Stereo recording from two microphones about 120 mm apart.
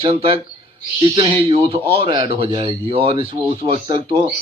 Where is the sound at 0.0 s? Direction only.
50° right (ahead or behind).